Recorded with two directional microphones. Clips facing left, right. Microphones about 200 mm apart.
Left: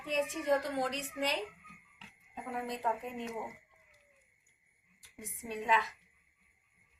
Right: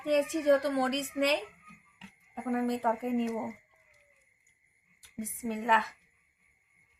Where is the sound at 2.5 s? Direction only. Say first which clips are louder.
Right 7 dB; 60° right (ahead or behind).